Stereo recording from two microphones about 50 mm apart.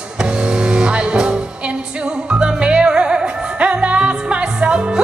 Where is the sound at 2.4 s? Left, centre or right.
Right.